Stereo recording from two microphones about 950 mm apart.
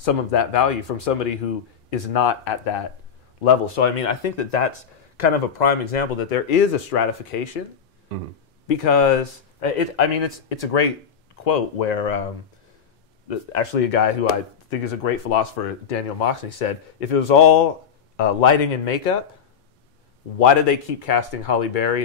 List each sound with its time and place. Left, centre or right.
0.0 s speech: left
3.4 s speech: left
8.6 s speech: left
13.3 s speech: left
14.7 s speech: left
15.9 s speech: left
20.3 s speech: left